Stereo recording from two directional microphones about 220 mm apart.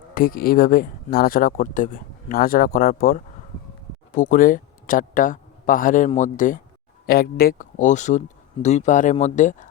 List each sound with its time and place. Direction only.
0.1 s speech: 40° left (ahead or behind)